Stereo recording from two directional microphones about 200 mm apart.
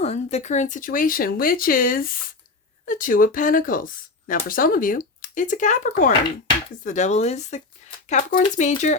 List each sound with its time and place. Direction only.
0.0 s speech: 30° left (ahead or behind)